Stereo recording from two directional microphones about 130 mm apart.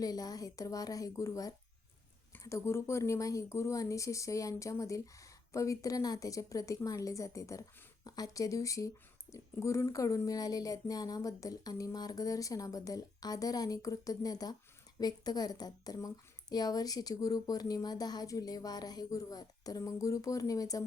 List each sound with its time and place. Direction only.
0.0 s speech: 30° left (ahead or behind)